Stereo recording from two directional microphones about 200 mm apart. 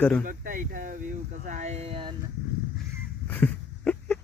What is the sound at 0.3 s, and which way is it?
Speech, 40° right (ahead or behind).